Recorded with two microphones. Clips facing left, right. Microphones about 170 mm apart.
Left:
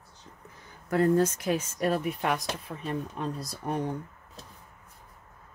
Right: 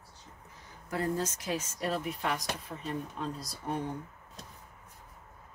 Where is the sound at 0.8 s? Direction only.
60° left (ahead or behind).